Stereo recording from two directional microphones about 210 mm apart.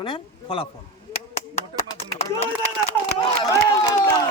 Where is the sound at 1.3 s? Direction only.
30° left (ahead or behind).